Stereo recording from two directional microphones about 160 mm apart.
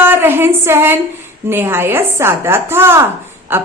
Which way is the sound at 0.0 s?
15° right (ahead or behind).